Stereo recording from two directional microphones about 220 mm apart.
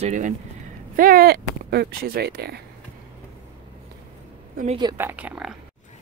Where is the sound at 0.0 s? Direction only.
35° right (ahead or behind).